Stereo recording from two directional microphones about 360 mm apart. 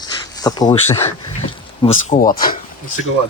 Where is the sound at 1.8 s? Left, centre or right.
Left.